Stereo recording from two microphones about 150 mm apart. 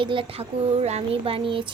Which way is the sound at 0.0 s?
35° right (ahead or behind).